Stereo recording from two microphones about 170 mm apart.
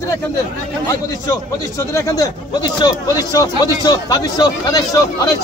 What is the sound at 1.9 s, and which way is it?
Speech, 20° left (ahead or behind).